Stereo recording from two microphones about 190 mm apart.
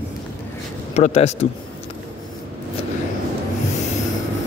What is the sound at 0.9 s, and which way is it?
Speech, 35° left (ahead or behind).